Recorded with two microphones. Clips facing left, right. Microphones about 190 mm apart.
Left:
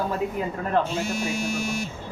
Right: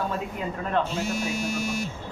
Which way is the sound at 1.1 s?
30° left (ahead or behind).